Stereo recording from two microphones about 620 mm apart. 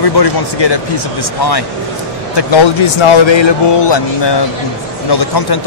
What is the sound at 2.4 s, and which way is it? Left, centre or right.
Speech, left.